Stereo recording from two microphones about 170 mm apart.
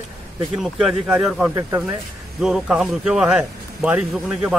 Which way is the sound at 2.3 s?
5° right (ahead or behind).